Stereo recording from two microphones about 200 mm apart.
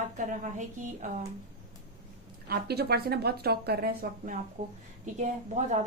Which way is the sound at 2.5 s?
50° right (ahead or behind).